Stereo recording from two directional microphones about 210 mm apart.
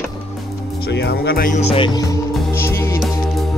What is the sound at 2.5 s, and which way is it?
Music, 10° left (ahead or behind).